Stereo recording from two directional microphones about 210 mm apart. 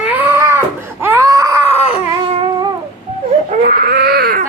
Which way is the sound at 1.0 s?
10° right (ahead or behind).